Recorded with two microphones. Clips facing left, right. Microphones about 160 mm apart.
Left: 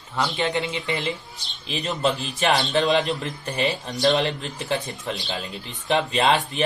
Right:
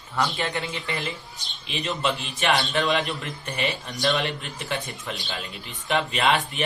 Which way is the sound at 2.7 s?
25° left (ahead or behind).